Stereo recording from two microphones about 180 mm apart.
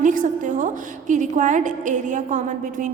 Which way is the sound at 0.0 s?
45° right (ahead or behind).